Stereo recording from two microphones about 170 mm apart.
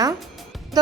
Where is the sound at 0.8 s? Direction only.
25° right (ahead or behind).